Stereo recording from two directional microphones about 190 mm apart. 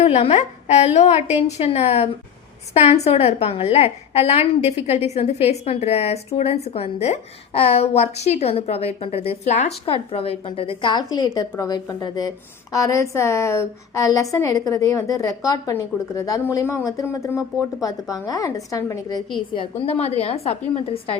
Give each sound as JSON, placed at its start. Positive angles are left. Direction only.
{"t": 0.0, "sound": "a woman's voice", "side_deg": 35}
{"t": 19.8, "sound": "a woman's voice", "side_deg": 35}